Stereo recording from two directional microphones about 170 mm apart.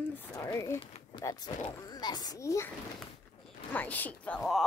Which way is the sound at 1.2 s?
25° left (ahead or behind).